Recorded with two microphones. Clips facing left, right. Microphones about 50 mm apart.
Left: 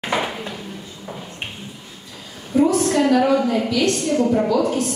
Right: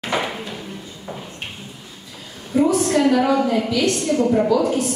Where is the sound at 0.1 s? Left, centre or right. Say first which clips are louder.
Even; centre.